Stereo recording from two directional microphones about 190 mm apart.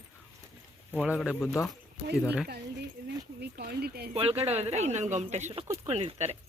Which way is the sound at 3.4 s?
55° right (ahead or behind).